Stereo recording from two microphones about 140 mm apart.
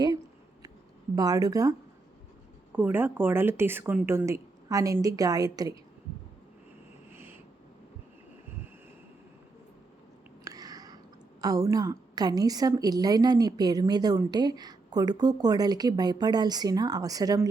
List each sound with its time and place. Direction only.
1.1 s a woman's voice: 25° right (ahead or behind)
2.7 s a woman's voice: 15° right (ahead or behind)
7.1 s a sound: 15° right (ahead or behind)
10.4 s a woman's voice: 25° right (ahead or behind)